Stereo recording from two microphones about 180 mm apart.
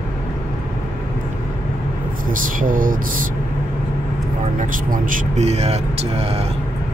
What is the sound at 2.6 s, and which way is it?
Speech, 50° right (ahead or behind).